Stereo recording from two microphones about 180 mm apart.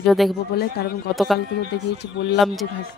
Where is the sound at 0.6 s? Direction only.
65° left (ahead or behind).